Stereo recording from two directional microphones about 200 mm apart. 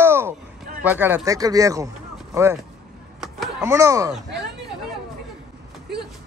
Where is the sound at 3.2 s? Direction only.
Centre (ahead or behind).